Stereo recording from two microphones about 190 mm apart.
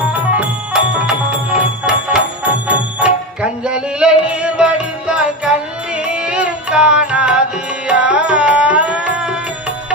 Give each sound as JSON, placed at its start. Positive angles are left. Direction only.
{"t": 0.0, "sound": "music", "side_deg": -5}